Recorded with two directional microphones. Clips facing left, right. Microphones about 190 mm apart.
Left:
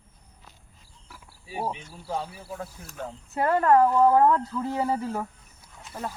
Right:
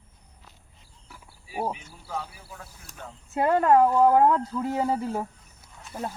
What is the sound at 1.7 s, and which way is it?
Speech, 30° left (ahead or behind).